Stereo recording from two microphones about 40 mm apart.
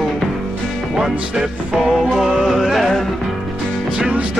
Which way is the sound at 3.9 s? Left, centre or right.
Right.